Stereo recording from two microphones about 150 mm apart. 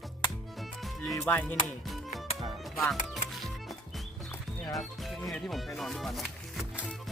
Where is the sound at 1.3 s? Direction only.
10° left (ahead or behind).